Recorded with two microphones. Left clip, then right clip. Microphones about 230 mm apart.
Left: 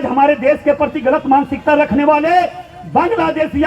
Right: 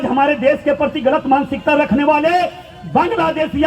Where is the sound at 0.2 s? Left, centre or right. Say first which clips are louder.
Left 3 dB; left.